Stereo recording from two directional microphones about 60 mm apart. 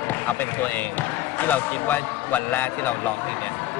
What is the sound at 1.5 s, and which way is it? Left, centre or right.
Speech, left.